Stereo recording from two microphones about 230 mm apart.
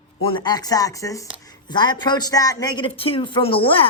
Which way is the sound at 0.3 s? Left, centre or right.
Centre.